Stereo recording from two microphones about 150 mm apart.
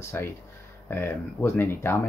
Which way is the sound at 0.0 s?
15° left (ahead or behind).